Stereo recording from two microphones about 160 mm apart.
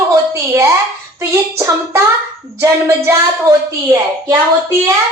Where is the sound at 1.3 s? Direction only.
15° right (ahead or behind).